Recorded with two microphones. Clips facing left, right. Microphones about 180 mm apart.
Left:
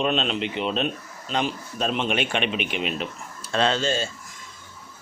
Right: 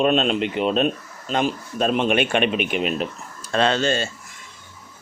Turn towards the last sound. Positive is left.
turn(degrees=-65)  # may be behind; listen again after turning